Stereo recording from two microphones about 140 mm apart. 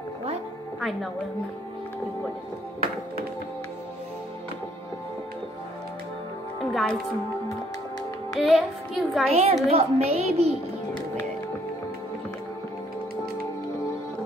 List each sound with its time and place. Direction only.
6.7 s music: centre (ahead or behind)
8.4 s a child's voice: centre (ahead or behind)
9.3 s a woman's voice: 45° right (ahead or behind)